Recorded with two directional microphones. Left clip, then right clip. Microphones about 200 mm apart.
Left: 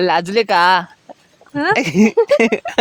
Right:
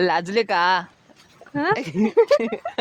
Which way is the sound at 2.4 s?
50° left (ahead or behind).